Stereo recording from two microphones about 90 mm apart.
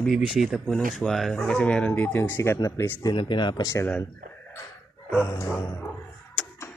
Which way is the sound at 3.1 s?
60° left (ahead or behind).